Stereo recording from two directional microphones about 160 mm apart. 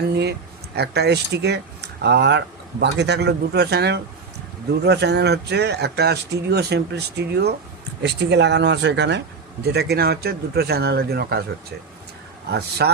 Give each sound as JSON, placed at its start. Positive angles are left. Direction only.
{"t": 0.0, "sound": "speech", "side_deg": -90}
{"t": 12.5, "sound": "speech", "side_deg": -90}